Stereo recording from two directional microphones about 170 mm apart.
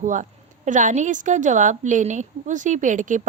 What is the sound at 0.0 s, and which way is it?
A woman's voice, 50° right (ahead or behind).